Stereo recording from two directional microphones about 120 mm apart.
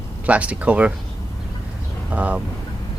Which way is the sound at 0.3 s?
10° right (ahead or behind).